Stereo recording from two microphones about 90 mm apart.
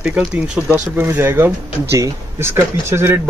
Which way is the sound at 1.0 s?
30° right (ahead or behind).